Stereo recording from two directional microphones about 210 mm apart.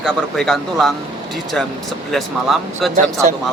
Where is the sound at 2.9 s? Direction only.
35° right (ahead or behind).